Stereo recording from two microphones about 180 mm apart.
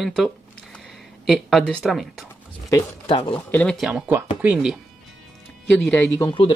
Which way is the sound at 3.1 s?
30° left (ahead or behind).